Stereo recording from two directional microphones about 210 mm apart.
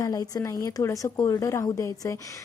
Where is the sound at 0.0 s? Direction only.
15° left (ahead or behind).